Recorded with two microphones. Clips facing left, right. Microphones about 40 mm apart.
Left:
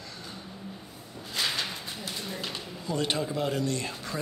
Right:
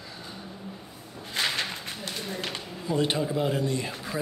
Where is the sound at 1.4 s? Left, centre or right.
Right.